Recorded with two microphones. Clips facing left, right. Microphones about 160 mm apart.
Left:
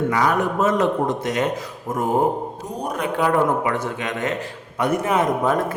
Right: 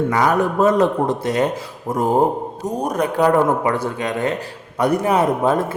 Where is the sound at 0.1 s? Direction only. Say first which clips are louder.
Right 3 dB; 45° right (ahead or behind).